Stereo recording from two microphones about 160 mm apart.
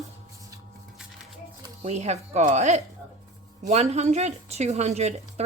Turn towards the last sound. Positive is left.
turn(degrees=-45)  # may be behind; listen again after turning